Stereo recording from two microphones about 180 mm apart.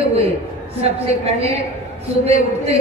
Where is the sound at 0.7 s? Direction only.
35° right (ahead or behind).